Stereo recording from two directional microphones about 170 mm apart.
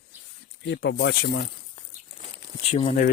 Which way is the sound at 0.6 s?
90° left.